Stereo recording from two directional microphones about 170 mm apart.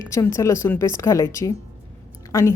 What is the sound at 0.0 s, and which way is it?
A woman's voice, 15° left (ahead or behind).